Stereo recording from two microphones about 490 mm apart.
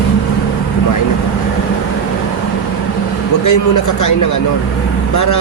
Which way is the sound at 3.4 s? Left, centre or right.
Left.